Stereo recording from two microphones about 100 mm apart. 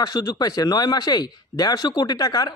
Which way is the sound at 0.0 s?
40° left (ahead or behind).